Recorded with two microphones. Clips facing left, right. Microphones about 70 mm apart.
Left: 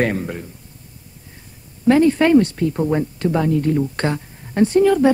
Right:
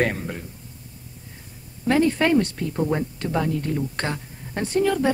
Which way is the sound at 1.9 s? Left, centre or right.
Centre.